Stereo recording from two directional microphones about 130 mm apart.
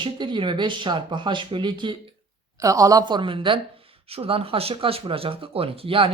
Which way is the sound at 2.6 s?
25° right (ahead or behind).